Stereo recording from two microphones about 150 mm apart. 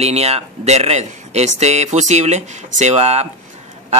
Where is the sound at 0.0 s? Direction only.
45° right (ahead or behind).